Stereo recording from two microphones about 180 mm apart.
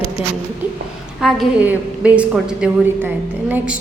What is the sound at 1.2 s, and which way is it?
A woman's voice, 5° right (ahead or behind).